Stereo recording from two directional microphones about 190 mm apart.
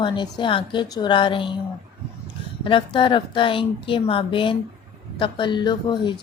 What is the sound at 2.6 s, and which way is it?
Speech, 25° left (ahead or behind).